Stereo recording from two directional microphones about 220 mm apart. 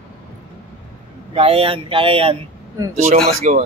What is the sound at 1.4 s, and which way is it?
Speech, 25° right (ahead or behind).